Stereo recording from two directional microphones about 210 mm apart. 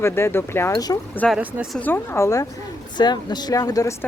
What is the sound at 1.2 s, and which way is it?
Speech, centre (ahead or behind).